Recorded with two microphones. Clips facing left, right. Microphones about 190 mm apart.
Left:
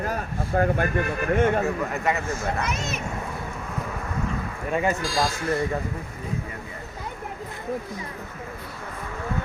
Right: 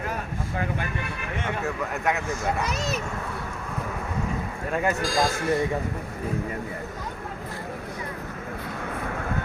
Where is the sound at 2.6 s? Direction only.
35° right (ahead or behind).